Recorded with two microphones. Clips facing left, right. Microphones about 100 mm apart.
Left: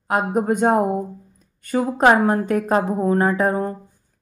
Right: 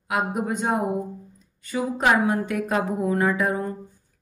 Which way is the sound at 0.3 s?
45° left (ahead or behind).